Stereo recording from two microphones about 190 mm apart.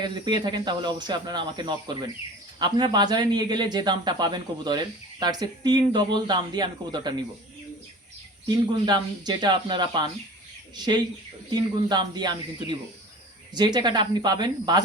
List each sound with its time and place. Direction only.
0.0 s speech: 20° right (ahead or behind)
8.4 s speech: 20° right (ahead or behind)
13.5 s speech: 20° right (ahead or behind)